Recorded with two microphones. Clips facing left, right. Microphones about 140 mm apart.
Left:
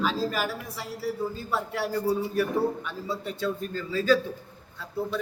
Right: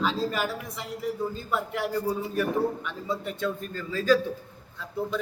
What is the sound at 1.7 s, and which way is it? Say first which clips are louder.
Speech: left 3 dB; 15° right (ahead or behind).